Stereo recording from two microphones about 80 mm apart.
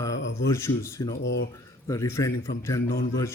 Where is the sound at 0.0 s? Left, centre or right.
Left.